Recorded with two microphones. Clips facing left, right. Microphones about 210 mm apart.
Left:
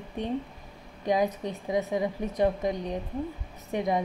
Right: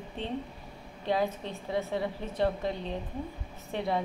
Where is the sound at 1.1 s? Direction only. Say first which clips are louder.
Left 3 dB; 15° left (ahead or behind).